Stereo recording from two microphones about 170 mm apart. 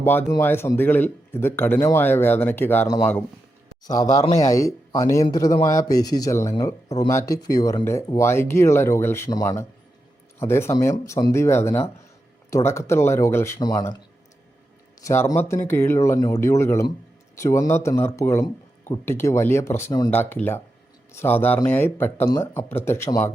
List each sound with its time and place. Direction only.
0.0 s speech: 15° left (ahead or behind)
4.4 s speech: 20° left (ahead or behind)
15.0 s speech: 15° left (ahead or behind)